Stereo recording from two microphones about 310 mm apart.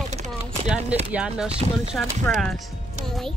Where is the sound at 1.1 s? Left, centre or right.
Centre.